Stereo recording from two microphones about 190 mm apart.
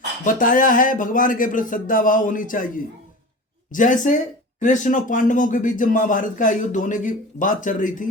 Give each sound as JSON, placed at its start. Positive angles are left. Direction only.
{"t": 0.3, "sound": "speech", "side_deg": 45}